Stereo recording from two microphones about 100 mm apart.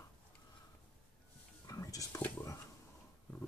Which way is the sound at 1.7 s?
35° left (ahead or behind).